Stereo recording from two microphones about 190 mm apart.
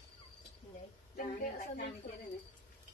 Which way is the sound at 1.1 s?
45° left (ahead or behind).